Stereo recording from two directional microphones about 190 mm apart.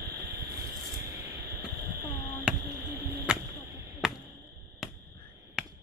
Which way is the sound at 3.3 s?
5° right (ahead or behind).